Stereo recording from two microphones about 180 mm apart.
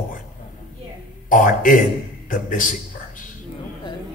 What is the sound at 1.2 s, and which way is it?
A man's voice, 45° left (ahead or behind).